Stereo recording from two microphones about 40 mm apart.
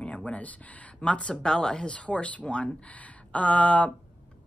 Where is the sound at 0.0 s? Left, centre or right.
Left.